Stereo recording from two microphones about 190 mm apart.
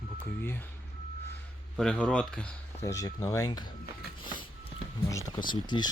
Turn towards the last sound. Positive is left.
turn(degrees=25)  # may be behind; listen again after turning